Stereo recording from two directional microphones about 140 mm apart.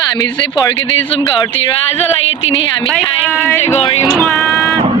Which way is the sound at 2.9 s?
15° left (ahead or behind).